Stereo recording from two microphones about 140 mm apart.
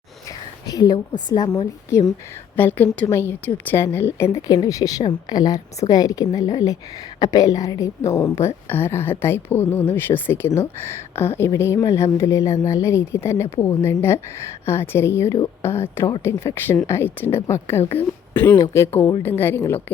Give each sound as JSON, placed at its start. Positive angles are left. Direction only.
{"t": 0.3, "sound": "whispering", "side_deg": 25}
{"t": 1.3, "sound": "speech", "side_deg": 30}
{"t": 2.6, "sound": "a woman's voice", "side_deg": 15}